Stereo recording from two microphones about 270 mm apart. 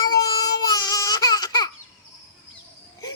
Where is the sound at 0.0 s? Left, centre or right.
Centre.